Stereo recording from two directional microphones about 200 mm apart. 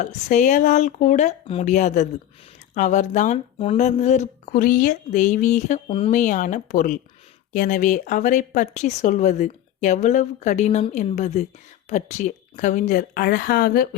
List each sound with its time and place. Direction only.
0.0 s speech: 40° left (ahead or behind)